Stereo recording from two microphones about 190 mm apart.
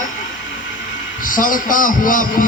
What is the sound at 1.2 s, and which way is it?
A man's voice, 45° left (ahead or behind).